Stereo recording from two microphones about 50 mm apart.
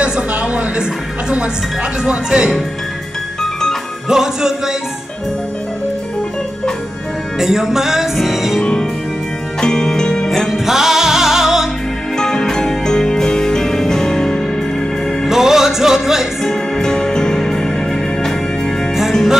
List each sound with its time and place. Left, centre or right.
0.0 s a sound: right
2.0 s speech: centre
4.1 s music: centre
7.3 s music: centre
8.5 s music: centre
10.3 s music: centre
12.2 s music: centre
15.2 s music: centre
16.4 s music: centre